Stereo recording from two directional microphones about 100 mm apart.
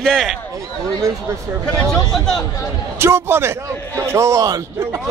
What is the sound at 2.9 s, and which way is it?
A man's voice, 25° right (ahead or behind).